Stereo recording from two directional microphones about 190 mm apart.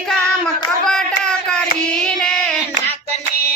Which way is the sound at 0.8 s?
5° left (ahead or behind).